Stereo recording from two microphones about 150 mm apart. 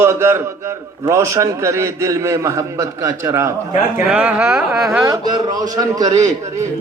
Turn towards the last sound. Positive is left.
turn(degrees=-20)  # may be behind; listen again after turning